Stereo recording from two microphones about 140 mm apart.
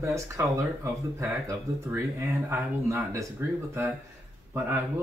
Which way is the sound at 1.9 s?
15° right (ahead or behind).